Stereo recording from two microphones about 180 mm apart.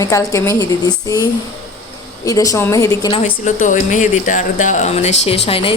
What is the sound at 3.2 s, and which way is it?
A woman's voice, 45° left (ahead or behind).